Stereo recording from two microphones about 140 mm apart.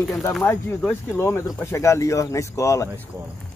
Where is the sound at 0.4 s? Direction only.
15° left (ahead or behind).